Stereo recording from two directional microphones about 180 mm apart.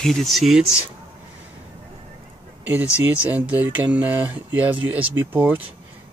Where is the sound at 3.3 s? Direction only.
10° right (ahead or behind).